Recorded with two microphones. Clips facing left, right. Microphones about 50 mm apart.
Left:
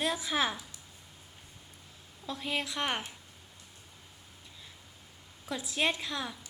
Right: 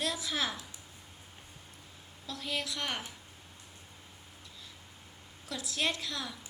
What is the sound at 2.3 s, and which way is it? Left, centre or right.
Speech, left.